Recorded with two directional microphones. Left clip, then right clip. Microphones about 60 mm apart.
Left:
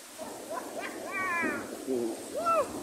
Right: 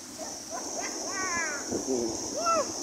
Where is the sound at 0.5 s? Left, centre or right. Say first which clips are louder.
Right 2 dB; left.